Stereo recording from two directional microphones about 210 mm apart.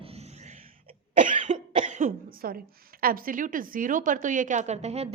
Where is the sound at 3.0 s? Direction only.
40° right (ahead or behind).